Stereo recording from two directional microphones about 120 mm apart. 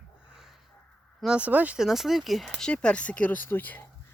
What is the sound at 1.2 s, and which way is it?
Speech, 10° right (ahead or behind).